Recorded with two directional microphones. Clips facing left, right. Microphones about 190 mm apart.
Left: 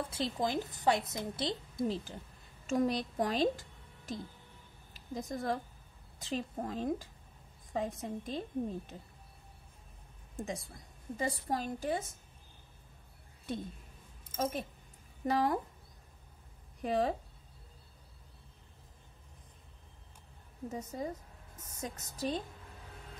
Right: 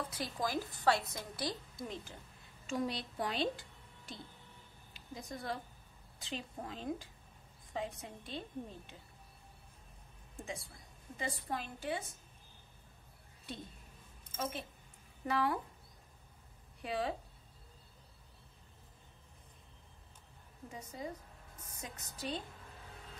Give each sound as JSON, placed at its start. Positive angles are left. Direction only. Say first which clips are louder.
{"t": 0.1, "sound": "a woman's voice", "louder": "left 4 dB", "side_deg": 25}
{"t": 2.6, "sound": "a woman's voice", "louder": "left 6 dB", "side_deg": 45}
{"t": 10.3, "sound": "a woman's voice", "louder": "left 5 dB", "side_deg": 40}
{"t": 14.3, "sound": "a woman's voice", "louder": "left 6 dB", "side_deg": 40}
{"t": 16.8, "sound": "a woman's voice", "louder": "left 6 dB", "side_deg": 45}
{"t": 20.7, "sound": "a woman's voice", "louder": "left 5 dB", "side_deg": 45}